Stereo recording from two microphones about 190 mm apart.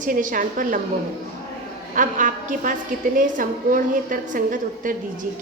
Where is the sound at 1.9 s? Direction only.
45° right (ahead or behind).